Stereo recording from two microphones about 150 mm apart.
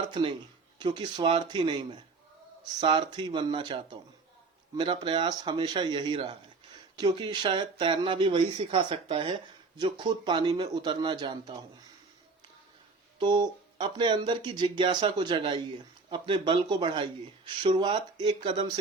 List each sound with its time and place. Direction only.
0.0 s a man's voice: 35° right (ahead or behind)
13.1 s a man's voice: 30° right (ahead or behind)